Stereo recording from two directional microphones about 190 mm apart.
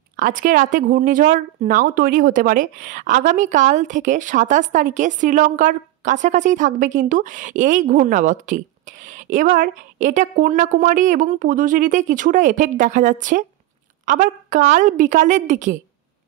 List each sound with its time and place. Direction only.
0.1 s a woman's voice: 45° right (ahead or behind)